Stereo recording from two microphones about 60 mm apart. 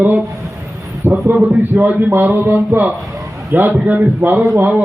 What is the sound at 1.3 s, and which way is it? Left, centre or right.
A man's voice, right.